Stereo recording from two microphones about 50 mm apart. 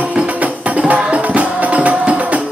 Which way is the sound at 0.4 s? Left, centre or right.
Right.